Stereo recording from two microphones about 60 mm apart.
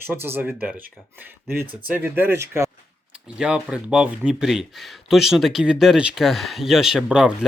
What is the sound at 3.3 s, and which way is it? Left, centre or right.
Speech, centre.